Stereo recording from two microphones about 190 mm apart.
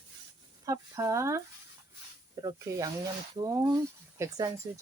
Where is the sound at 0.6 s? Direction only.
15° right (ahead or behind).